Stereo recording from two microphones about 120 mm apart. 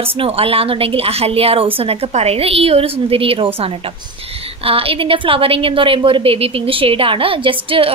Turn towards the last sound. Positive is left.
turn(degrees=-50)  # may be behind; listen again after turning